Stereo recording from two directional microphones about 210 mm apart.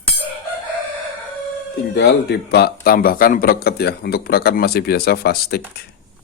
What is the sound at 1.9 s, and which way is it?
Speech, 50° left (ahead or behind).